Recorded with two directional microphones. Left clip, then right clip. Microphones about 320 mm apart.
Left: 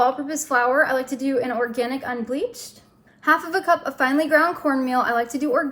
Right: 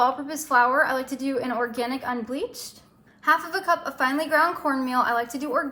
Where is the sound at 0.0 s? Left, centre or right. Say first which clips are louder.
Left 2 dB; centre.